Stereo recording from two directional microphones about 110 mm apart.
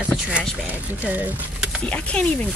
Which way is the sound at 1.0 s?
15° right (ahead or behind).